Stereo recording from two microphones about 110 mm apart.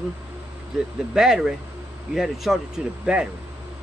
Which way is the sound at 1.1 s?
5° right (ahead or behind).